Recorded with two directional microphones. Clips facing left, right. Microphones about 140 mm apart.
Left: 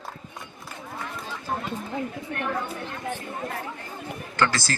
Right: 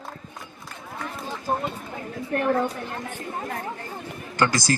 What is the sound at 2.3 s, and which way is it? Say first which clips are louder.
Speech: right 9 dB; 40° right (ahead or behind).